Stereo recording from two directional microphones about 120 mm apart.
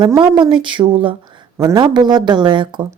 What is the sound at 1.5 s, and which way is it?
Speech, 30° right (ahead or behind).